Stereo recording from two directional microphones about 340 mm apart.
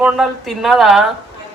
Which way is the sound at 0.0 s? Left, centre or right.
Centre.